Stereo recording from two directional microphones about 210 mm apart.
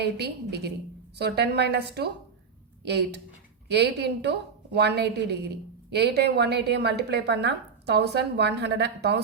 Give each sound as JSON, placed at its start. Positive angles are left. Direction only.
{"t": 0.0, "sound": "a woman's voice", "side_deg": -50}